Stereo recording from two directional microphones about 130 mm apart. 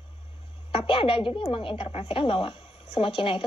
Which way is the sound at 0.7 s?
45° left (ahead or behind).